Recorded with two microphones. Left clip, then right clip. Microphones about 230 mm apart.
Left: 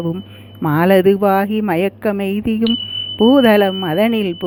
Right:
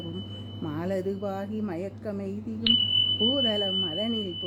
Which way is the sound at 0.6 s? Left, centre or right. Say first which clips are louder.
Left 19 dB; left.